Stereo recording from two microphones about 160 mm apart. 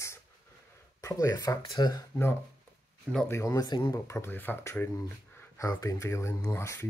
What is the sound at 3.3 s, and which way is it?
Speech, 20° left (ahead or behind).